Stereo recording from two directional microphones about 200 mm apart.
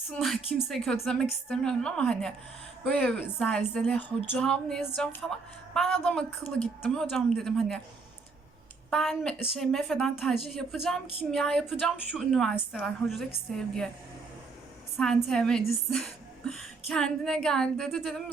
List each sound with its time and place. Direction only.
0.1 s a woman's voice: centre (ahead or behind)
8.9 s a woman's voice: 5° left (ahead or behind)
14.9 s a woman's voice: 5° left (ahead or behind)